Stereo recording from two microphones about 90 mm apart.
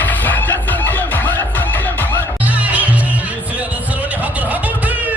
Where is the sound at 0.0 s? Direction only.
20° left (ahead or behind).